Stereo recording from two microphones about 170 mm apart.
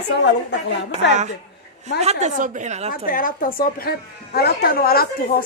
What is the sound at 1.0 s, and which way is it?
Speech, 90° left.